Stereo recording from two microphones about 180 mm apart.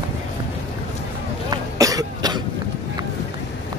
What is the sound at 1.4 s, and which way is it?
Cough, 20° right (ahead or behind).